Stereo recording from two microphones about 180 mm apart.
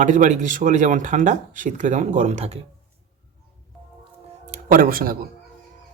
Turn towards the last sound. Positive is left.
turn(degrees=-55)  # may be behind; listen again after turning